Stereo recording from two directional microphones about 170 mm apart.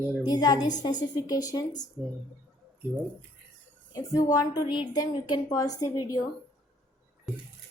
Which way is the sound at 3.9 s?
20° left (ahead or behind).